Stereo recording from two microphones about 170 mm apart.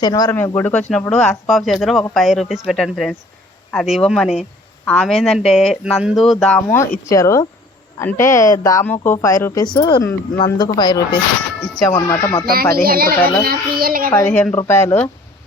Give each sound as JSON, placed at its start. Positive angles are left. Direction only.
{"t": 0.0, "sound": "speech", "side_deg": 25}
{"t": 0.3, "sound": "speech", "side_deg": 10}
{"t": 12.7, "sound": "a child's voice", "side_deg": -60}
{"t": 14.3, "sound": "speech", "side_deg": 0}
{"t": 14.5, "sound": "speech", "side_deg": 15}